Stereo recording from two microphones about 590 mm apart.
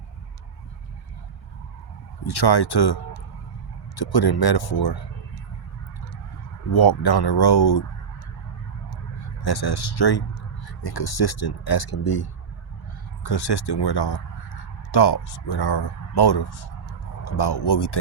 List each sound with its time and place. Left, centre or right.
2.2 s speech: left
6.7 s speech: left
9.4 s speech: left